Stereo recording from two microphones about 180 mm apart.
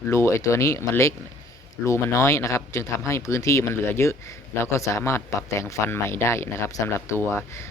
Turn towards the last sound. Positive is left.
turn(degrees=15)  # may be behind; listen again after turning